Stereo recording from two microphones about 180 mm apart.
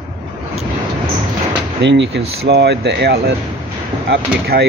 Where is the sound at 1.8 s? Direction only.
85° right; by 4.6 s 60° right (ahead or behind).